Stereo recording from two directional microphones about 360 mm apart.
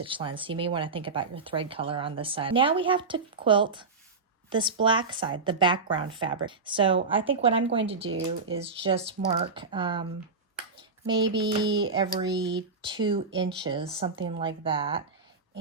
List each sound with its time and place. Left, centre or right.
0.0 s speech: centre
11.0 s a sound: centre
11.4 s speech: centre